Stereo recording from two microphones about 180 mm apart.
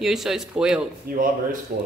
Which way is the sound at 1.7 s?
55° right (ahead or behind).